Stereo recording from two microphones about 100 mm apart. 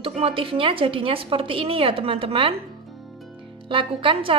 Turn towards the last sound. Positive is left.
turn(degrees=-60)  # may be behind; listen again after turning